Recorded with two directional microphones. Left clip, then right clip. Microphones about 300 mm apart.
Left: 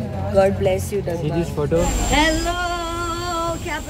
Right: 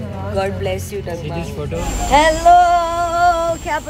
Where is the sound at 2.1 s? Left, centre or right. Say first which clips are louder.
Right 11 dB; centre.